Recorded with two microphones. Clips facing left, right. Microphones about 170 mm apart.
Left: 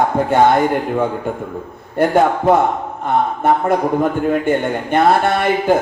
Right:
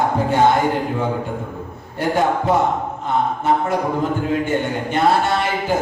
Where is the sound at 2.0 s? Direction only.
55° left (ahead or behind).